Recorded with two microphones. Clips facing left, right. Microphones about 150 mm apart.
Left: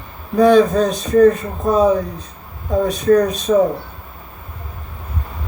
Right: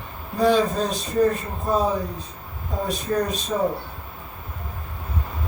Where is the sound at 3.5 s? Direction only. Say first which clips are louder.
Left 14 dB; 90° left.